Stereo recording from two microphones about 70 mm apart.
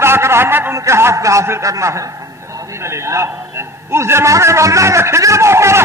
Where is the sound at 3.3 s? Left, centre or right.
Right.